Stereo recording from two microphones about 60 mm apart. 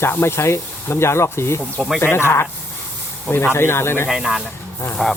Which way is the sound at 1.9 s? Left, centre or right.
Left.